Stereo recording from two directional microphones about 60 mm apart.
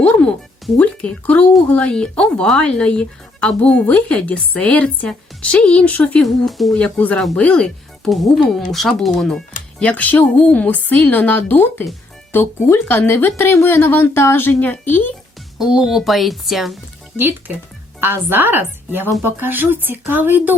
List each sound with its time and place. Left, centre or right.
0.0 s music: left
0.8 s speech: left
6.2 s speech: centre
7.3 s speech: centre
8.1 s speech: centre
9.8 s speech: left
15.5 s speech: centre
18.0 s speech: right